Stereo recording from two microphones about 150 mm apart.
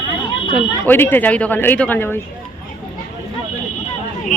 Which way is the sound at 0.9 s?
15° left (ahead or behind).